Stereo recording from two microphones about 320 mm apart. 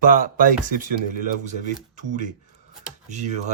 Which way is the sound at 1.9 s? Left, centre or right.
Right.